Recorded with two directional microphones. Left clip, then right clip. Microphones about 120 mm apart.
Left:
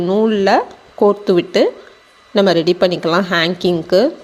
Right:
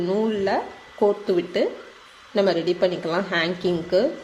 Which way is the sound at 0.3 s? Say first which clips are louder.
Left 10 dB; 70° left (ahead or behind).